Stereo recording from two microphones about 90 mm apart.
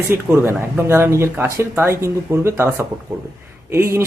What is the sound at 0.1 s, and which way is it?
Speech, 30° right (ahead or behind).